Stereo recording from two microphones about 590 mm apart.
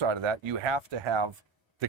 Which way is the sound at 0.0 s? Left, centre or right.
Right.